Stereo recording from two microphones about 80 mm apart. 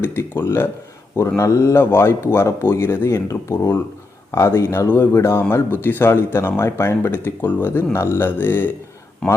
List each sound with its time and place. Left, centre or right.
0.0 s speech: left